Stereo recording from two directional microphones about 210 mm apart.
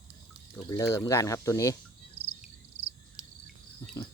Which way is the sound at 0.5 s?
15° left (ahead or behind).